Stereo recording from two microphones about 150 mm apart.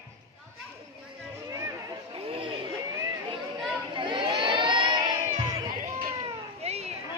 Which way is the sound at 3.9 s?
35° right (ahead or behind).